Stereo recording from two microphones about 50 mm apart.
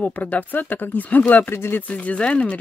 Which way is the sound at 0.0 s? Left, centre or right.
Left.